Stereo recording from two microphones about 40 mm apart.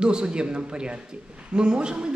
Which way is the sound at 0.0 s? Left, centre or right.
Right.